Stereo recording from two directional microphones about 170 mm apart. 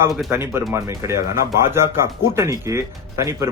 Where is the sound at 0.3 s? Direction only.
15° right (ahead or behind).